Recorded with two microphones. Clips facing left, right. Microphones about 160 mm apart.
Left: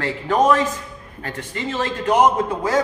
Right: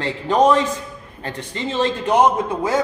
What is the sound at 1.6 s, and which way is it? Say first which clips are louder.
Speech: right 4 dB; 25° right (ahead or behind).